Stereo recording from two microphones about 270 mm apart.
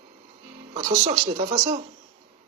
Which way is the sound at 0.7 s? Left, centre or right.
Centre.